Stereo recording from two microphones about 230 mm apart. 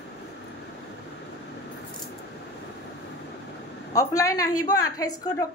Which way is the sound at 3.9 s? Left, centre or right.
Centre.